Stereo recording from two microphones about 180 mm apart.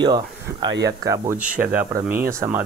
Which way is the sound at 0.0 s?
25° right (ahead or behind).